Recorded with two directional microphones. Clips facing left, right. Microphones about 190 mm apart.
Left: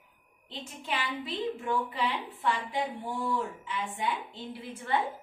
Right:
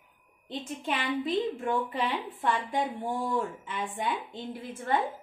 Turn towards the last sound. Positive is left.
turn(degrees=-45)  # may be behind; listen again after turning